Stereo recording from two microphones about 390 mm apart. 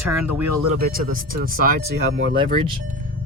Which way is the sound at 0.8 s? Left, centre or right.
Right.